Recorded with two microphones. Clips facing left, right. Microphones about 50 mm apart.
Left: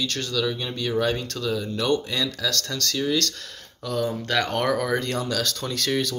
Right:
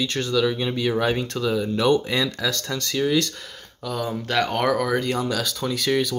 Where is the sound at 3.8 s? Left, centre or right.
Centre.